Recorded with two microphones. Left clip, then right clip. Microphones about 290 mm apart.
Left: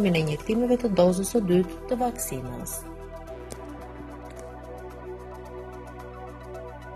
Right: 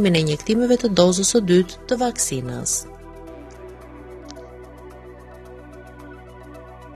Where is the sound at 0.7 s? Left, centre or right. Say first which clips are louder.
Right 4 dB; right.